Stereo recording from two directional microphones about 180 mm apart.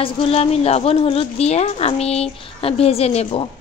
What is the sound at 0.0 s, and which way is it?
A woman's voice, 30° left (ahead or behind).